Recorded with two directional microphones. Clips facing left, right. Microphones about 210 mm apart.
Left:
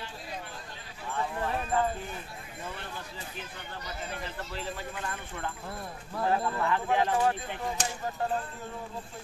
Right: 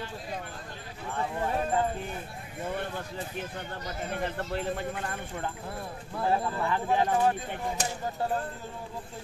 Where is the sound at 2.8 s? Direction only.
55° right (ahead or behind).